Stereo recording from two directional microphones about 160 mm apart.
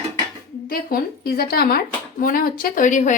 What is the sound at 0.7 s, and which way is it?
A woman's voice, 70° left (ahead or behind).